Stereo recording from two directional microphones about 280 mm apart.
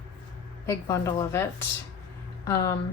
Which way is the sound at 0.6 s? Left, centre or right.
Centre.